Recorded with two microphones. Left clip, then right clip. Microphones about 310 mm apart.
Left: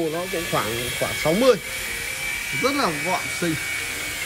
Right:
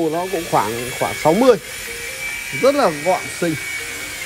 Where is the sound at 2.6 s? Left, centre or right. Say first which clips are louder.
Right 8 dB; centre.